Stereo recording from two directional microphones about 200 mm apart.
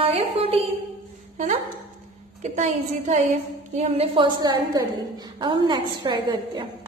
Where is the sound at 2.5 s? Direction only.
40° right (ahead or behind).